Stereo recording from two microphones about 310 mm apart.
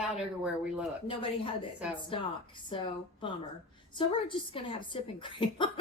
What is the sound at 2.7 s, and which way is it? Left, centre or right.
Speech, centre.